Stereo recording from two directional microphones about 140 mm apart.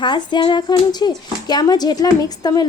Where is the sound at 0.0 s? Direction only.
35° left (ahead or behind).